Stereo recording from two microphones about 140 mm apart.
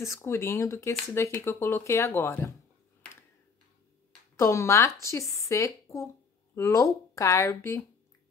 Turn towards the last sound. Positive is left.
turn(degrees=20)  # may be behind; listen again after turning